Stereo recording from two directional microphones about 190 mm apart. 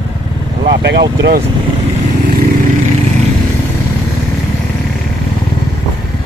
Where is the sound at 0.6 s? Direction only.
65° right (ahead or behind).